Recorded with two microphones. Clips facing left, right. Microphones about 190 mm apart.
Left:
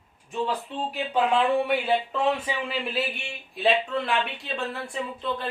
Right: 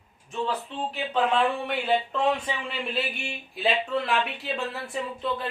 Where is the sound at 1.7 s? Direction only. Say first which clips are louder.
Left 1 dB; 5° left (ahead or behind).